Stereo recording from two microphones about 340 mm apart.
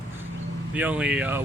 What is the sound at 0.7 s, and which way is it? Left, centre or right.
Speech, centre.